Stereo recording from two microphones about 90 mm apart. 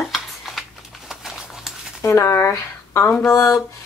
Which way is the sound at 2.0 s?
30° left (ahead or behind).